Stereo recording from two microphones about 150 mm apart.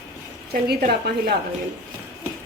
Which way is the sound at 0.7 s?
90° right.